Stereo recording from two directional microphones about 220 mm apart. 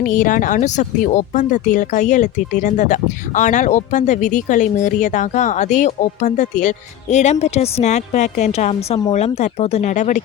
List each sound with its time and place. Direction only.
0.1 s speech: 35° left (ahead or behind)